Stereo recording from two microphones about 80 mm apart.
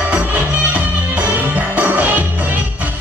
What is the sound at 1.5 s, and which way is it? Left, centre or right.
Music, centre.